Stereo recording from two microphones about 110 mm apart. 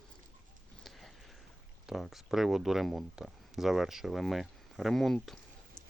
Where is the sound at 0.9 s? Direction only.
Centre (ahead or behind).